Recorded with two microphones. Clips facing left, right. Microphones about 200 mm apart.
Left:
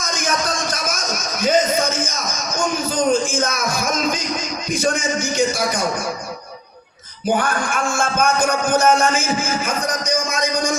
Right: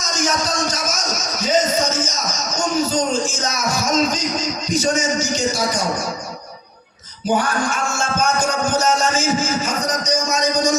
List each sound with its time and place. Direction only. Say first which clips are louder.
0.0 s a man's voice: right 1 dB; 55° left (ahead or behind)
7.3 s music: even; 55° left (ahead or behind)